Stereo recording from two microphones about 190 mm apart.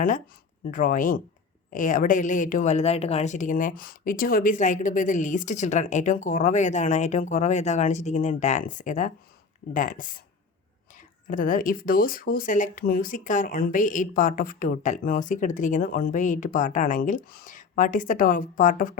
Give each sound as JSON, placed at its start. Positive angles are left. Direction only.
{"t": 0.7, "sound": "a woman's voice", "side_deg": 45}